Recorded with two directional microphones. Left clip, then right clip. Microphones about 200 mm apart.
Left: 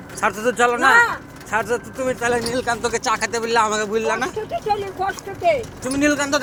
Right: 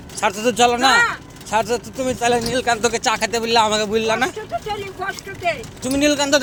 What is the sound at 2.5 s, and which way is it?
Speech, 50° right (ahead or behind).